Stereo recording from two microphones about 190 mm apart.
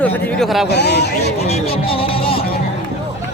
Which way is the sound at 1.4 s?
35° left (ahead or behind).